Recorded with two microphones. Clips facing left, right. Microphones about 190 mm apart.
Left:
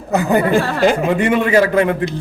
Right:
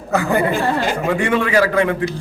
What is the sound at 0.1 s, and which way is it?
A man's voice, 20° left (ahead or behind).